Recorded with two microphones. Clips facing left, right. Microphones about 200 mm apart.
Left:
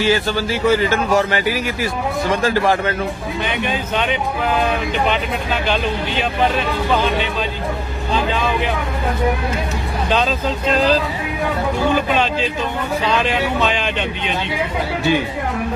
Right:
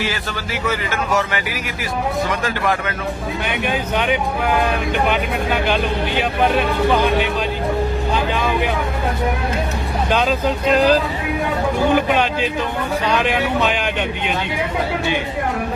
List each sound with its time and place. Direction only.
0.0 s speech: 30° left (ahead or behind)
3.5 s speech: 10° right (ahead or behind)
10.1 s speech: 15° right (ahead or behind)